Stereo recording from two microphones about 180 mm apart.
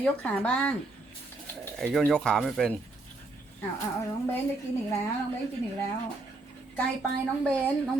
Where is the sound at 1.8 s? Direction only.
Centre (ahead or behind).